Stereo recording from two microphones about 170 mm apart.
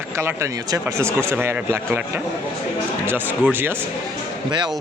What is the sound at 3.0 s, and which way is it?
Speech, 10° right (ahead or behind).